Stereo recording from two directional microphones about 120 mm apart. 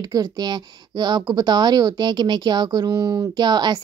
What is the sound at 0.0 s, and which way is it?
Speech, 35° right (ahead or behind).